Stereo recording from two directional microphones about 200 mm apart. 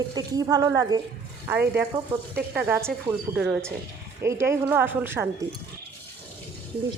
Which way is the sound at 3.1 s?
20° right (ahead or behind).